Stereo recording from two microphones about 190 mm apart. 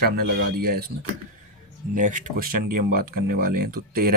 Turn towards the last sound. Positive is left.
turn(degrees=-50)  # may be behind; listen again after turning